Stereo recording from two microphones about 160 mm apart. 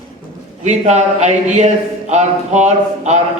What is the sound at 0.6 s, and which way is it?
A man's voice, 45° right (ahead or behind).